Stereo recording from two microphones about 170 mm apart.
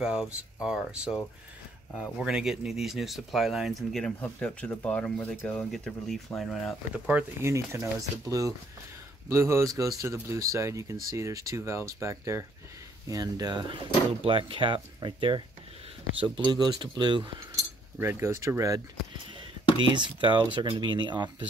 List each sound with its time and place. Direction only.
0.0 s speech: 5° right (ahead or behind); by 15.4 s 30° right (ahead or behind)
16.4 s speech: 25° right (ahead or behind)
17.9 s speech: 15° right (ahead or behind)
19.8 s speech: 30° right (ahead or behind)